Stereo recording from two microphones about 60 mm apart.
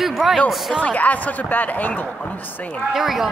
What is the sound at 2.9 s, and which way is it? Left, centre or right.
Speech, centre.